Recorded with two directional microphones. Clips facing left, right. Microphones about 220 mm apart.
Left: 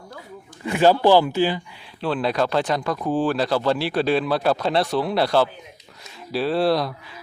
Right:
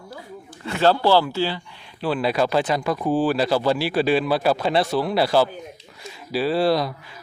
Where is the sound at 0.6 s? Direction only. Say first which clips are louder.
Left 2 dB; 15° left (ahead or behind).